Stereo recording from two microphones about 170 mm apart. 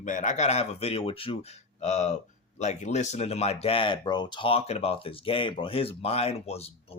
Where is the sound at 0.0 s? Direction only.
50° left (ahead or behind).